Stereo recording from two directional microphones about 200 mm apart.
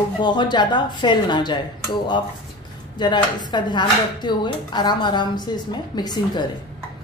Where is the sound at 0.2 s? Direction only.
20° left (ahead or behind).